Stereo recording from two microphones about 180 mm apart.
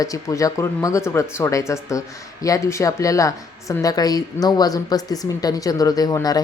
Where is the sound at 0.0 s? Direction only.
20° left (ahead or behind).